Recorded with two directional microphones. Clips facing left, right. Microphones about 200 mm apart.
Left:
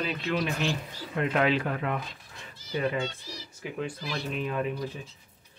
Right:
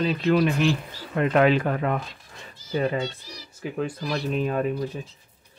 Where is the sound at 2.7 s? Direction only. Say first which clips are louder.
Right 4 dB; 35° right (ahead or behind).